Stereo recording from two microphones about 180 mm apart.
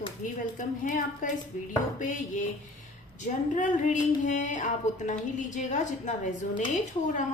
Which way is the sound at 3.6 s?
40° left (ahead or behind).